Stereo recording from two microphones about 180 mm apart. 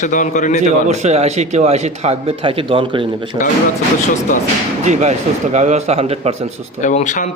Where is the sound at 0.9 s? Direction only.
40° right (ahead or behind).